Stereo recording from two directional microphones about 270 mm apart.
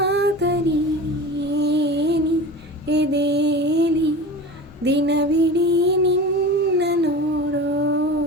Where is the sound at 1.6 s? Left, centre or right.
Right.